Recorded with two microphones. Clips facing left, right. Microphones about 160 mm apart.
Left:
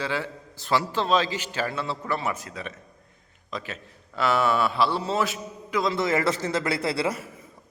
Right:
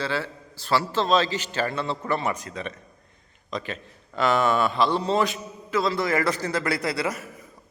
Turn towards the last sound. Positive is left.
turn(degrees=30)  # may be behind; listen again after turning